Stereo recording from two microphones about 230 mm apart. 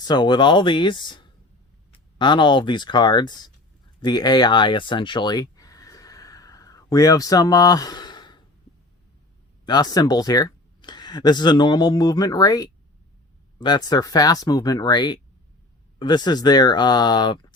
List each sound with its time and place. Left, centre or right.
0.0 s speech: centre
4.0 s a sound: centre
9.6 s speech: centre